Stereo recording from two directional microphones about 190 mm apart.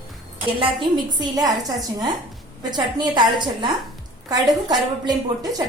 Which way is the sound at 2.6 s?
20° right (ahead or behind).